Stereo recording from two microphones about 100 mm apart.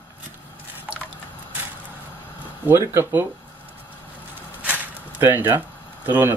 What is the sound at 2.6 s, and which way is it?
Speech, 30° right (ahead or behind).